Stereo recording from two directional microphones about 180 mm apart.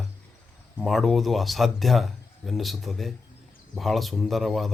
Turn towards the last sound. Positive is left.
turn(degrees=0)  # may be behind; listen again after turning